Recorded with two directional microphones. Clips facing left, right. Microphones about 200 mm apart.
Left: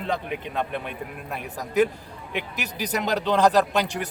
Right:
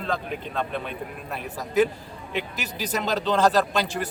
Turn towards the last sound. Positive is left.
turn(degrees=15)  # may be behind; listen again after turning